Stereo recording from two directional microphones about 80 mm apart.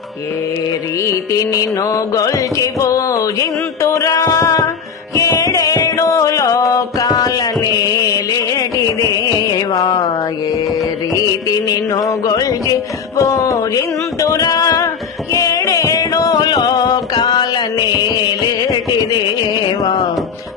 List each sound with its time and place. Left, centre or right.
0.7 s music: left
4.1 s music: left
10.5 s music: left